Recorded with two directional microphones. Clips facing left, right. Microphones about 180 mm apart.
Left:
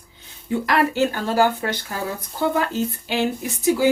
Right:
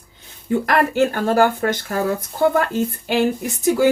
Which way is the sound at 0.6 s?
50° right (ahead or behind).